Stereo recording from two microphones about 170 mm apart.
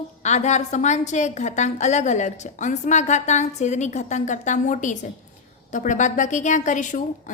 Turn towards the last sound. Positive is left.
turn(degrees=45)  # may be behind; listen again after turning